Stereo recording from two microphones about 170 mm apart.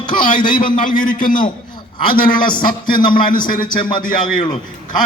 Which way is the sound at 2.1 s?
55° left (ahead or behind).